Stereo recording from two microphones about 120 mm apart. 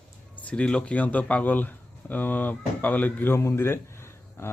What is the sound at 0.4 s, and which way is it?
Speech, 10° left (ahead or behind).